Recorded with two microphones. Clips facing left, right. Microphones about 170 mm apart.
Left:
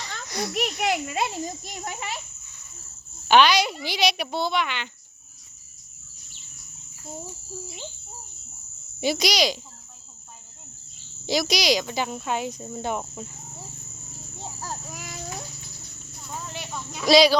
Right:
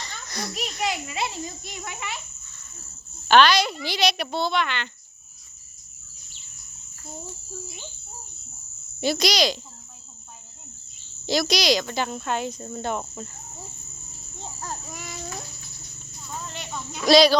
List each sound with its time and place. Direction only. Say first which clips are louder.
0.3 s a child's voice: left 4 dB; 10° left (ahead or behind)
0.8 s a child's voice: left 1 dB; 55° left (ahead or behind); by 2.2 s 40° left (ahead or behind)
3.2 s cricket: right 1 dB; 10° left (ahead or behind)
9.0 s cricket: right 1 dB; 10° left (ahead or behind)
11.3 s cricket: right 1 dB; 10° left (ahead or behind)
14.3 s a sound: even; 5° left (ahead or behind)
16.3 s cricket: even; 5° left (ahead or behind)